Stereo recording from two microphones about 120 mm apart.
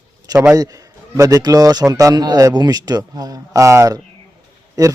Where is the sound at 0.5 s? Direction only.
30° right (ahead or behind).